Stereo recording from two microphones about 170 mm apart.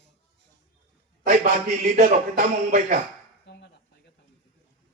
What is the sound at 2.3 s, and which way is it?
Speech, 50° right (ahead or behind).